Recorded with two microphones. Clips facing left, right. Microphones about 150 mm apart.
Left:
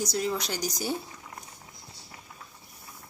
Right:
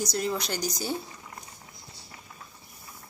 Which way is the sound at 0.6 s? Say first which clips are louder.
Even; 10° left (ahead or behind).